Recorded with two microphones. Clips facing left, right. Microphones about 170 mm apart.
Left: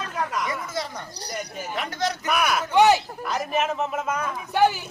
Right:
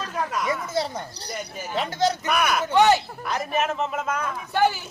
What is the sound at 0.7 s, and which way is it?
A man's voice, 25° right (ahead or behind).